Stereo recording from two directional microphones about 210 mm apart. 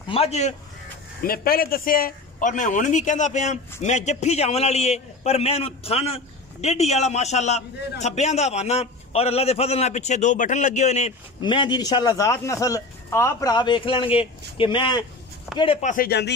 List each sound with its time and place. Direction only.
0.1 s a man's voice: 30° left (ahead or behind)
1.2 s a man's voice: 45° left (ahead or behind); by 15.9 s 25° left (ahead or behind)
15.9 s speech: 45° left (ahead or behind)